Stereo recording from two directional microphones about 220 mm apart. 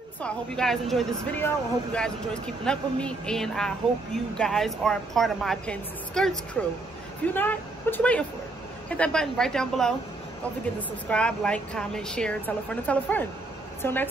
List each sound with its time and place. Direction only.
0.2 s a woman's voice: centre (ahead or behind)
11.1 s a woman's voice: 5° left (ahead or behind)